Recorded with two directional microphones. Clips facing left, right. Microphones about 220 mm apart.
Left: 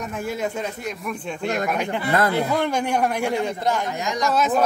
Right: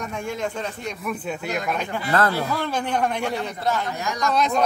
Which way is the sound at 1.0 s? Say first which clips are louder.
Left 1 dB; 5° right (ahead or behind).